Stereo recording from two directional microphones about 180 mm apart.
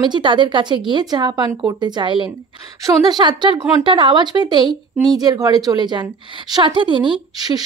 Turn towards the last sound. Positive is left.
turn(degrees=-20)  # may be behind; listen again after turning